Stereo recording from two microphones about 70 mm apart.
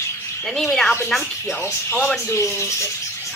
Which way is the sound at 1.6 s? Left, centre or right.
Left.